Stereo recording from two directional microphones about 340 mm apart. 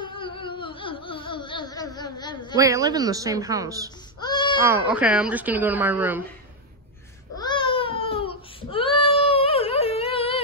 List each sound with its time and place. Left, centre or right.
0.0 s a sound: centre
2.5 s a woman's voice: centre
4.2 s baby cry: centre
4.6 s speech: centre
7.3 s baby cry: centre
8.7 s a sound: centre